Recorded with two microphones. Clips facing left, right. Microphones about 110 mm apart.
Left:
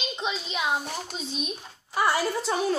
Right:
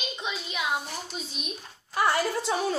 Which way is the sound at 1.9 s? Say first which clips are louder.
Even; 5° left (ahead or behind).